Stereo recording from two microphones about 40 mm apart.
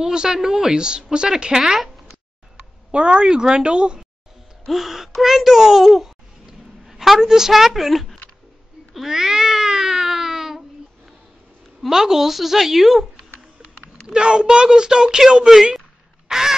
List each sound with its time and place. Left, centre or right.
0.0 s a woman's voice: centre
2.9 s a woman's voice: right
4.6 s a child's voice: centre
8.9 s cat: centre
11.9 s a woman's voice: centre
14.0 s a woman's voice: right
16.3 s crow: centre